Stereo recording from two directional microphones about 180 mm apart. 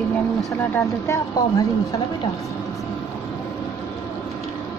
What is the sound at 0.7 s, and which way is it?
A woman's voice, 15° left (ahead or behind).